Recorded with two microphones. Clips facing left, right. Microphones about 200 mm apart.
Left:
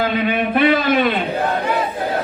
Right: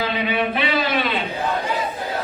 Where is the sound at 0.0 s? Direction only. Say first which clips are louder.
Left 4 dB; 50° left (ahead or behind).